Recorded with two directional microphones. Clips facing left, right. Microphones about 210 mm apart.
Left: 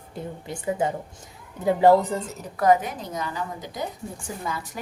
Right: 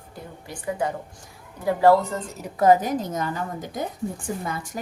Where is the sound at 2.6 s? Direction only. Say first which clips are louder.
Right 2 dB; 30° right (ahead or behind); by 4.8 s 50° right (ahead or behind).